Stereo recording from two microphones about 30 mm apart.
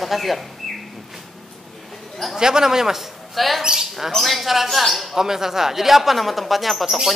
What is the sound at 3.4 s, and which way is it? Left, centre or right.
Speech, centre.